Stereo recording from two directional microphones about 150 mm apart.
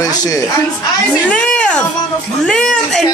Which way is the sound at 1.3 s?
10° left (ahead or behind).